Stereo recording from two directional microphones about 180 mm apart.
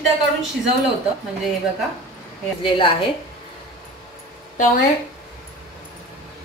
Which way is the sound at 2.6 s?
30° left (ahead or behind).